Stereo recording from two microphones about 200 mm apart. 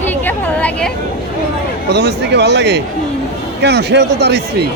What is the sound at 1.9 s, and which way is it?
Speech, 55° right (ahead or behind).